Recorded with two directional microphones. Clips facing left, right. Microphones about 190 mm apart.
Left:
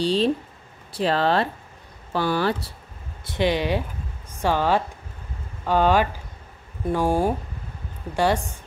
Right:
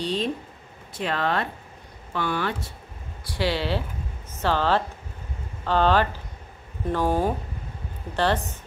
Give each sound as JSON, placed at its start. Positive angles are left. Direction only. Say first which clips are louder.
{"t": 0.0, "sound": "speech", "louder": "left 6 dB", "side_deg": 30}
{"t": 3.3, "sound": "speech", "louder": "left 3 dB", "side_deg": 20}